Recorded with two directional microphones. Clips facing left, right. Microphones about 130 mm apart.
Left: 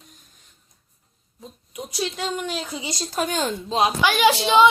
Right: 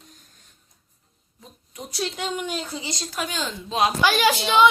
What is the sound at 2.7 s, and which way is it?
Speech, 15° left (ahead or behind).